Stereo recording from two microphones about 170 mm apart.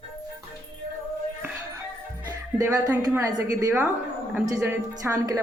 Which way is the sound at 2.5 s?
20° right (ahead or behind).